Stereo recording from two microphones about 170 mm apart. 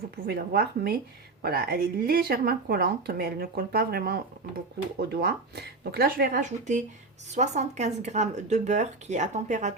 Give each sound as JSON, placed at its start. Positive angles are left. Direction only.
{"t": 0.3, "sound": "a woman's voice", "side_deg": -65}